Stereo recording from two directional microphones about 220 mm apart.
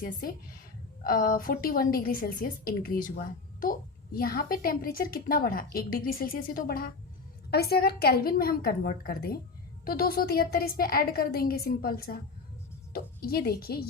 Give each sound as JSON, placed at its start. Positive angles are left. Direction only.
{"t": 0.0, "sound": "a woman's voice", "side_deg": 40}